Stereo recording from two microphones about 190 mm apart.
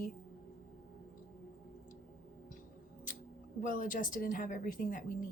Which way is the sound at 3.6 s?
45° left (ahead or behind).